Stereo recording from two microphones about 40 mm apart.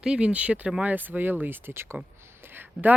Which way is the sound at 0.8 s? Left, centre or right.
Right.